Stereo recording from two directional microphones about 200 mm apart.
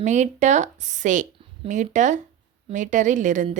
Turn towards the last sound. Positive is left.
turn(degrees=-40)  # may be behind; listen again after turning